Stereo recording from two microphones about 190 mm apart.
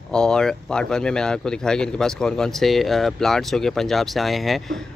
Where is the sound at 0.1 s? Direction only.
5° left (ahead or behind).